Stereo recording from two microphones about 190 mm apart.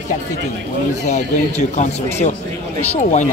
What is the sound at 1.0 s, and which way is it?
Speech, 35° left (ahead or behind).